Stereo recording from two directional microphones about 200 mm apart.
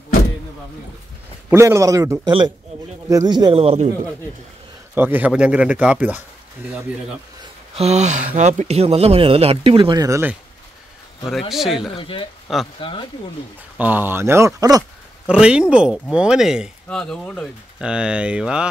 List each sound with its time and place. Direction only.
1.5 s a man's voice: 15° right (ahead or behind); by 3.9 s 30° right (ahead or behind)
4.9 s a man's voice: 10° right (ahead or behind)
7.7 s speech: 35° right (ahead or behind); by 10.3 s 15° right (ahead or behind)
11.2 s speech: centre (ahead or behind)
11.9 s speech: 25° left (ahead or behind)
12.5 s speech: centre (ahead or behind)
13.7 s a man's voice: 10° right (ahead or behind)
15.2 s speech: 5° right (ahead or behind)